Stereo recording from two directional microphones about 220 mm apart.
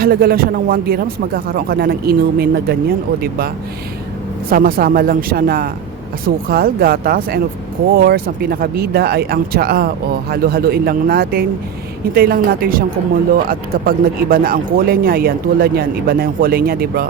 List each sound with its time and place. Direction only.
0.0 s a man's voice: 45° right (ahead or behind)